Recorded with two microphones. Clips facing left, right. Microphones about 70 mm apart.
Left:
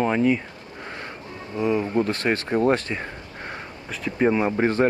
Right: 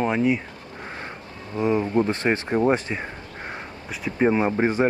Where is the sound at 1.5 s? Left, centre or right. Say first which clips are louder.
Right 1 dB; right.